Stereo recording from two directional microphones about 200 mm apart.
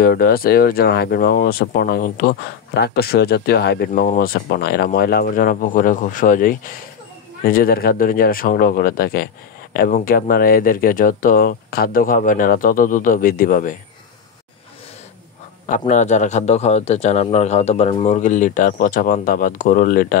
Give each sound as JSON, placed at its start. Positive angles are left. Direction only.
{"t": 0.0, "sound": "speech", "side_deg": 50}
{"t": 15.6, "sound": "a man's voice", "side_deg": 40}